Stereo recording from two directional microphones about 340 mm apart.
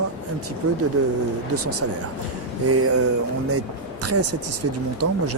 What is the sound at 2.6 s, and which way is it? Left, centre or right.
Speech, right.